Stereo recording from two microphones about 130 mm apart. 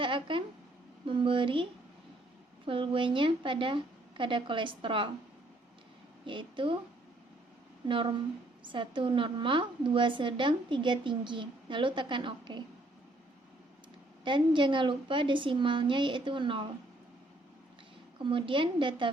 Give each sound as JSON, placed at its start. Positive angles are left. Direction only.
{"t": 0.0, "sound": "a sound", "side_deg": -40}
{"t": 1.0, "sound": "a woman's voice", "side_deg": -40}
{"t": 2.6, "sound": "a woman's voice", "side_deg": -40}
{"t": 6.2, "sound": "a woman's voice", "side_deg": -40}
{"t": 7.9, "sound": "a woman's voice", "side_deg": -40}
{"t": 14.3, "sound": "a woman's voice", "side_deg": -40}
{"t": 18.2, "sound": "a woman's voice", "side_deg": -40}